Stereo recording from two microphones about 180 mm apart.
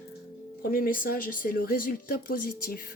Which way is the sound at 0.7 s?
50° left (ahead or behind).